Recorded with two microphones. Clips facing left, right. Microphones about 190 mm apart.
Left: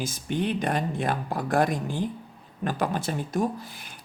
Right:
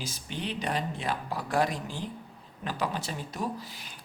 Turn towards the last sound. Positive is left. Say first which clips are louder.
# left 1 dB
turn(degrees=50)  # may be behind; listen again after turning